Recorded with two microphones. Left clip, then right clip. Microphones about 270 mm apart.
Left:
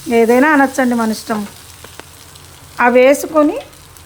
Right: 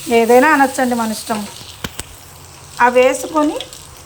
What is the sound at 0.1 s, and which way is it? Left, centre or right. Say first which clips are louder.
Frying: even; left.